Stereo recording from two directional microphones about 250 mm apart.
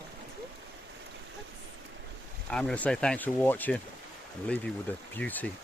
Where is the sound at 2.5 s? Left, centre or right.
Centre.